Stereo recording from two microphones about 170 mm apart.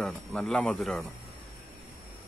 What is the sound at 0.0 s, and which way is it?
Speech, 5° left (ahead or behind).